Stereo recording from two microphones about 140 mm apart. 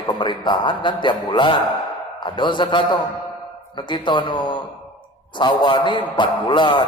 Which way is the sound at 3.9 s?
35° left (ahead or behind).